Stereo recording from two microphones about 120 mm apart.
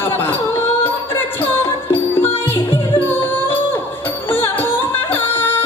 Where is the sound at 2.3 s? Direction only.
20° left (ahead or behind).